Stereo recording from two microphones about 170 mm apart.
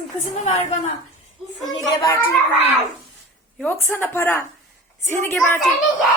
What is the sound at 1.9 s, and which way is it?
Speech, 20° left (ahead or behind).